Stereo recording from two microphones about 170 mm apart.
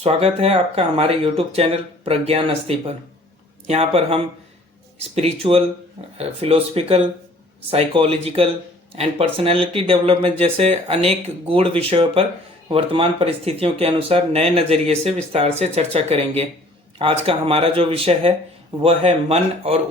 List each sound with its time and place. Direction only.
0.0 s speech: 35° right (ahead or behind)